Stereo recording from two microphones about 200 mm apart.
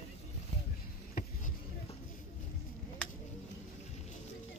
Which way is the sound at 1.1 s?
40° left (ahead or behind).